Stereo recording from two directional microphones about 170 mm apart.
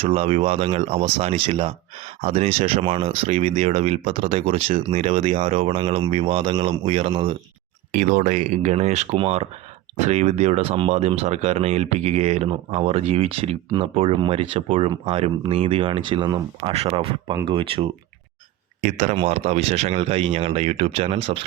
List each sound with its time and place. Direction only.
0.0 s speech: 35° right (ahead or behind)
7.9 s speech: 50° right (ahead or behind); by 17.8 s 30° right (ahead or behind)
18.8 s speech: 50° right (ahead or behind)